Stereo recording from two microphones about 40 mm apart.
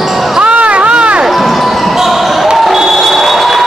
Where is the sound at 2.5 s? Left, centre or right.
Centre.